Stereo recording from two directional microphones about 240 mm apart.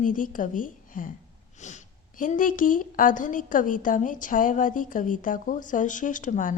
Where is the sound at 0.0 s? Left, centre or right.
Left.